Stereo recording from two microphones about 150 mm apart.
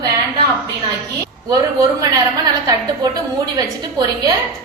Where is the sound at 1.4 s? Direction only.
25° right (ahead or behind).